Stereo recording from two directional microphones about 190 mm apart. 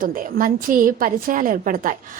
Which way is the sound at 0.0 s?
45° right (ahead or behind).